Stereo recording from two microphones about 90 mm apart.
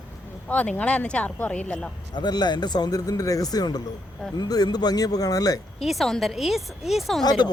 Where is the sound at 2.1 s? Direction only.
55° left (ahead or behind).